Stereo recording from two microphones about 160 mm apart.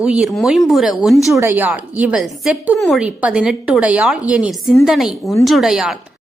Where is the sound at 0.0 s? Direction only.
5° right (ahead or behind).